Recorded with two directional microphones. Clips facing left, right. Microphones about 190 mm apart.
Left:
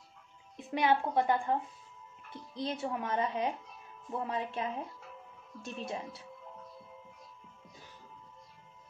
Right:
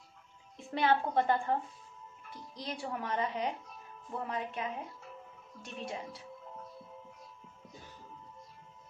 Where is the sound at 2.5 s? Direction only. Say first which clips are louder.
Left 4 dB; 25° left (ahead or behind).